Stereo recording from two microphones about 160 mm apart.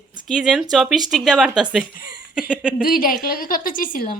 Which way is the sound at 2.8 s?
60° left (ahead or behind).